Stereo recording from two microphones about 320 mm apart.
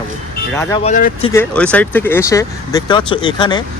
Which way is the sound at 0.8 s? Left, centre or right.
Left.